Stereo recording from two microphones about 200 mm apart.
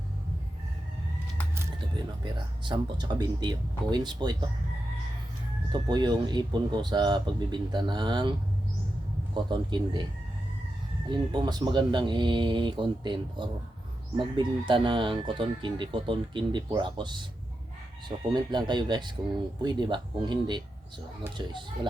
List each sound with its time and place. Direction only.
1.8 s speech: 25° right (ahead or behind)
5.9 s speech: 20° right (ahead or behind)
11.1 s speech: 20° right (ahead or behind)
18.3 s speech: 20° right (ahead or behind)